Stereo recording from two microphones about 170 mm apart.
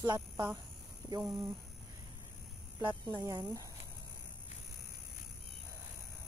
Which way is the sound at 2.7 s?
25° right (ahead or behind).